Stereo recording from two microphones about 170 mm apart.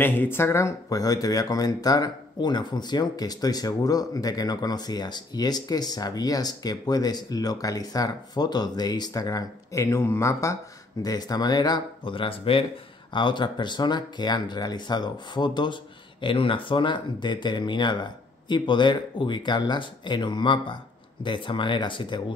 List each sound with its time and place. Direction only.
0.0 s speech: 10° left (ahead or behind); by 22.2 s 30° left (ahead or behind)